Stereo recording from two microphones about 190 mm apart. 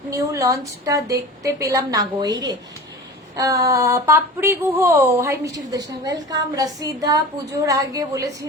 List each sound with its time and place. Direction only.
0.1 s a woman's voice: 15° right (ahead or behind)